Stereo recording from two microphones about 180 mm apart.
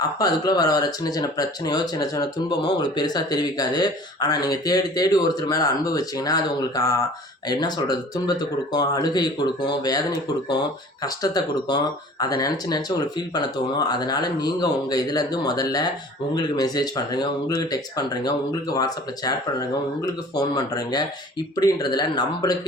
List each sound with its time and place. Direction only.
0.2 s speech: 20° left (ahead or behind)
11.0 s speech: 20° left (ahead or behind)